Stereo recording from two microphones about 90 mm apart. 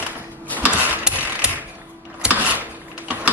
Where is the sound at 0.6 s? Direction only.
15° right (ahead or behind).